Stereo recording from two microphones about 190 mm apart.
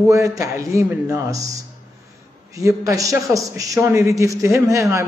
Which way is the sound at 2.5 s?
15° right (ahead or behind).